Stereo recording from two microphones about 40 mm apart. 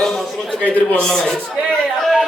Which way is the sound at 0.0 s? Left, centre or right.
Centre.